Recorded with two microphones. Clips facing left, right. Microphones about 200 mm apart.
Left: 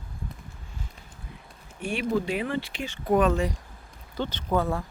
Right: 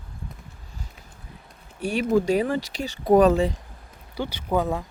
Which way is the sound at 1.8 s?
40° right (ahead or behind).